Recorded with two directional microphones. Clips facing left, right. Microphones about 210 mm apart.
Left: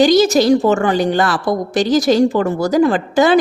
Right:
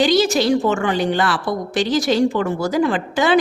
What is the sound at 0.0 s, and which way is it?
A woman's voice, 40° left (ahead or behind).